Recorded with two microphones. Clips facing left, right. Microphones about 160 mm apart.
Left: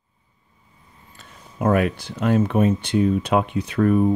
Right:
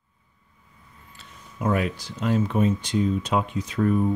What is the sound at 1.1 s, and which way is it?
Speech, 55° left (ahead or behind).